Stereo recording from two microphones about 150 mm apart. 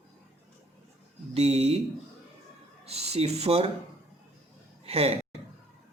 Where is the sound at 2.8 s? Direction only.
45° right (ahead or behind).